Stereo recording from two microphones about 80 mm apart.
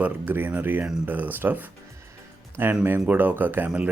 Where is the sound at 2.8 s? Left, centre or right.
Right.